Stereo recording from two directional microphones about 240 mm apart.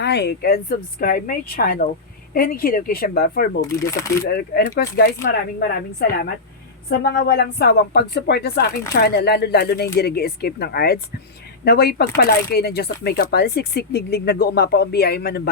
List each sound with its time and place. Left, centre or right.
0.0 s speech: left